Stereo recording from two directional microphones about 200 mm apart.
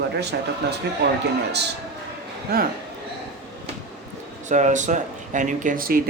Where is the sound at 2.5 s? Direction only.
50° right (ahead or behind).